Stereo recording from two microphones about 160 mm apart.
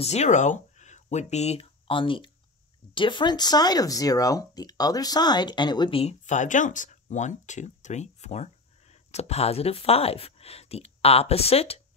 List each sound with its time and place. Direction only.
0.0 s speech: 45° left (ahead or behind)
6.2 s speech: 50° left (ahead or behind)